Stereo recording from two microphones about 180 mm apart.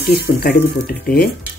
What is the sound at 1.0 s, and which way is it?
Speech, 60° left (ahead or behind).